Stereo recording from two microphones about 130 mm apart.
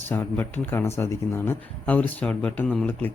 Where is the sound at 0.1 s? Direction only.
15° left (ahead or behind).